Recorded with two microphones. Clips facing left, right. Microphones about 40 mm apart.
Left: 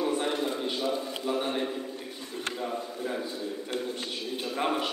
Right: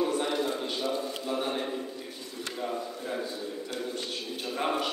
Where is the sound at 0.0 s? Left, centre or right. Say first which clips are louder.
Even; centre.